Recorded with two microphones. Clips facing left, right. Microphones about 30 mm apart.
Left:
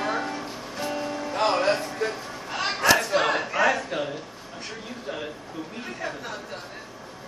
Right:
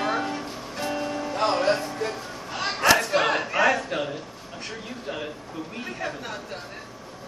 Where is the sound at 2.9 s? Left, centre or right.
Centre.